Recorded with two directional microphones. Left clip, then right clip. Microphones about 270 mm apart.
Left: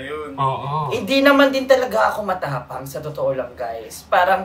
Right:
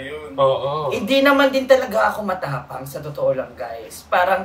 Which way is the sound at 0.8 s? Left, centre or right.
Centre.